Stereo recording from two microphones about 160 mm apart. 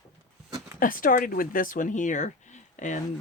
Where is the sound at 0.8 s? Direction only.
60° left (ahead or behind).